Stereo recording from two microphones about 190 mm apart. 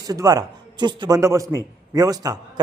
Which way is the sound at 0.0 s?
20° right (ahead or behind).